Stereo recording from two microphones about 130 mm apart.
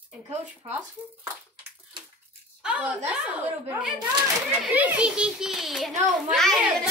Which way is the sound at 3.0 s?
10° right (ahead or behind).